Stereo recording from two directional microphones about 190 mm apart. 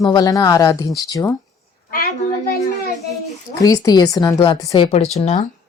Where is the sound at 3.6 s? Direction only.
20° left (ahead or behind).